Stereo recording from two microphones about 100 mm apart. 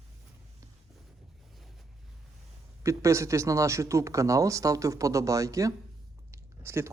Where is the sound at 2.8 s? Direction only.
30° right (ahead or behind).